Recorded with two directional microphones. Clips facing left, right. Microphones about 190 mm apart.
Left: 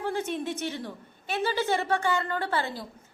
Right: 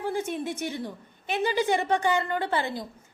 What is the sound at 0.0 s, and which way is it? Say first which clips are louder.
A woman's voice: right 1 dB; 10° right (ahead or behind).